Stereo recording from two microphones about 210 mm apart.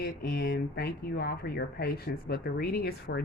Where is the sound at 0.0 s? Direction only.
50° left (ahead or behind).